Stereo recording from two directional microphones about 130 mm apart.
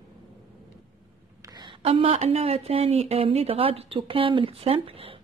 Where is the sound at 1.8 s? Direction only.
50° right (ahead or behind).